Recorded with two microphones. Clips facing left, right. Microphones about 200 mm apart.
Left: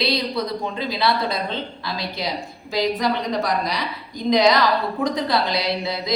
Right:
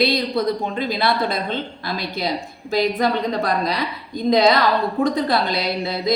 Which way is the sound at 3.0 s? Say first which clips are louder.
Right 2 dB; 55° right (ahead or behind).